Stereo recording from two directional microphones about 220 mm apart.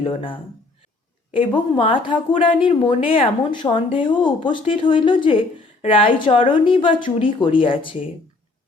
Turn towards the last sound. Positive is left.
turn(degrees=25)  # may be behind; listen again after turning